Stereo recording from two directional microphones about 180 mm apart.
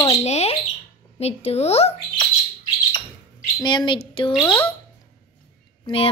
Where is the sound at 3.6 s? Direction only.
25° left (ahead or behind).